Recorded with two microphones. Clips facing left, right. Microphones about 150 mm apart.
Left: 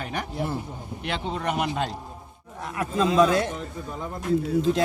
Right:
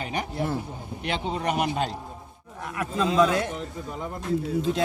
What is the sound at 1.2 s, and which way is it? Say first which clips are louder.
Speech: right 1 dB; 35° right (ahead or behind).